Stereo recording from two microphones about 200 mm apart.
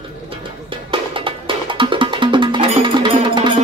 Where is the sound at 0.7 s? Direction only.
25° right (ahead or behind).